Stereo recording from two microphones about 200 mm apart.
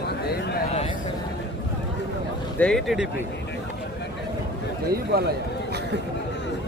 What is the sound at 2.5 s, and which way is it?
Speech, 5° left (ahead or behind).